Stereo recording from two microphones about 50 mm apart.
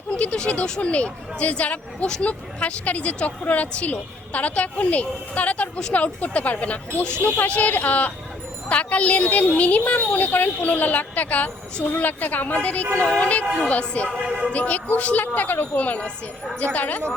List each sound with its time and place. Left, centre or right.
0.1 s a woman's voice: left
14.3 s speech: right
14.5 s a woman's voice: left